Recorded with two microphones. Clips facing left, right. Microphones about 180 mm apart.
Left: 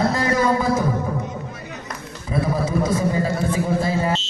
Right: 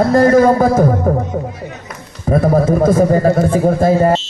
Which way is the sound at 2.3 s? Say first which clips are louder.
Right 10 dB; 50° right (ahead or behind).